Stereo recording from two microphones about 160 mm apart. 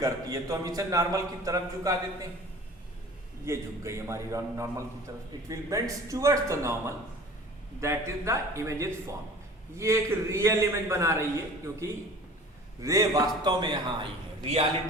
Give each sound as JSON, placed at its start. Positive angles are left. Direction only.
{"t": 0.0, "sound": "a man's voice", "side_deg": -20}
{"t": 3.4, "sound": "a man's voice", "side_deg": -15}